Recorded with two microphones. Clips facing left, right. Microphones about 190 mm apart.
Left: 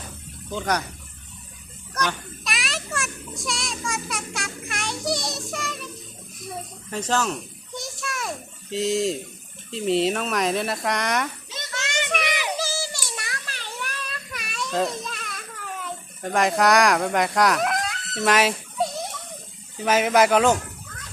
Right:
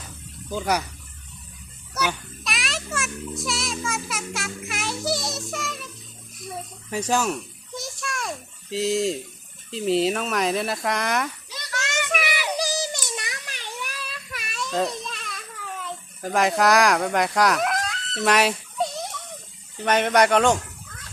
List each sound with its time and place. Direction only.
0.5 s speech: 10° right (ahead or behind)
1.9 s a child's voice: 10° right (ahead or behind)
6.9 s speech: 10° right (ahead or behind)
7.8 s a sound: centre (ahead or behind)
8.7 s a child's voice: centre (ahead or behind)
11.4 s children playing: 25° left (ahead or behind)
12.5 s child singing: 15° right (ahead or behind); by 18.6 s centre (ahead or behind)
19.8 s a child's voice: 5° left (ahead or behind)